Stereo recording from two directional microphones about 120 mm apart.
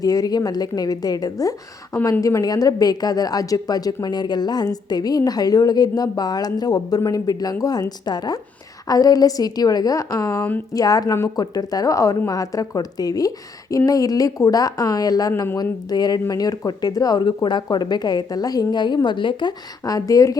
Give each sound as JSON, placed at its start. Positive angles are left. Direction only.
{"t": 0.0, "sound": "speech", "side_deg": 30}